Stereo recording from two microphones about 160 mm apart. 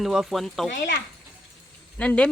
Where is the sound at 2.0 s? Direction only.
5° left (ahead or behind).